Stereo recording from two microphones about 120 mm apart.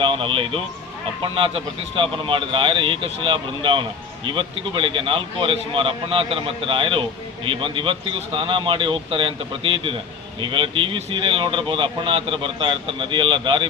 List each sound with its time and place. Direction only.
0.0 s speech: 45° right (ahead or behind)